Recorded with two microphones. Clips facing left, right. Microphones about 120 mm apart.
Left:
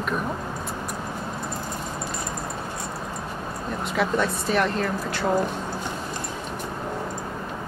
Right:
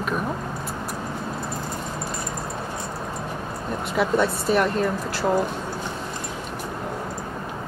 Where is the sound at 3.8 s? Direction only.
Centre (ahead or behind).